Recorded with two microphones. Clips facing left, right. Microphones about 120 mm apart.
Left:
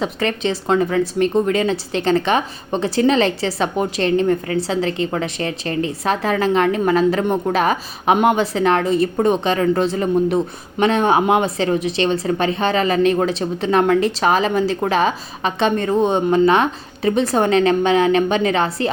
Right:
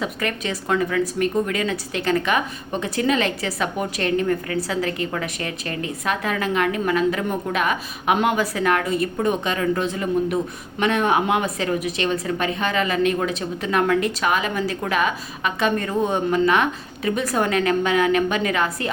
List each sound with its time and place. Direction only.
0.0 s a woman's voice: 30° left (ahead or behind)